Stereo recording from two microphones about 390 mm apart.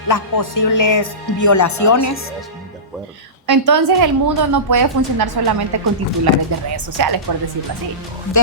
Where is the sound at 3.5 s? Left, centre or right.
Right.